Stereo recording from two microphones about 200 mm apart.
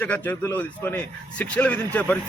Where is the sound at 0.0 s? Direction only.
10° left (ahead or behind).